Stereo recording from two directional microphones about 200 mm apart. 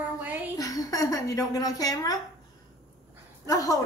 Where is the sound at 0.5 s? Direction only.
15° left (ahead or behind).